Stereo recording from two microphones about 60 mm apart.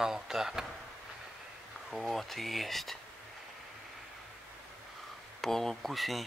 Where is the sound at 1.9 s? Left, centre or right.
Centre.